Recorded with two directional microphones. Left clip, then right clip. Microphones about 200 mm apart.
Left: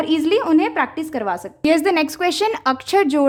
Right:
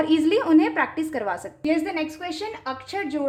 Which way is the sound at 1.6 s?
55° left (ahead or behind).